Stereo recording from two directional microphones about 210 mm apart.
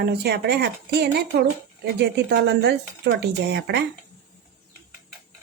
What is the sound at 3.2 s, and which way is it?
Speech, 55° right (ahead or behind).